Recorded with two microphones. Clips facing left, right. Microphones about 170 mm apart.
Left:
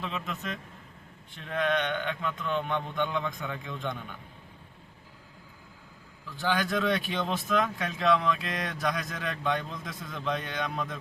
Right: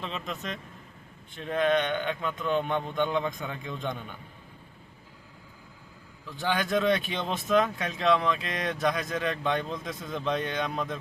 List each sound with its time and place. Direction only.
0.0 s speech: 5° left (ahead or behind)
6.4 s speech: centre (ahead or behind)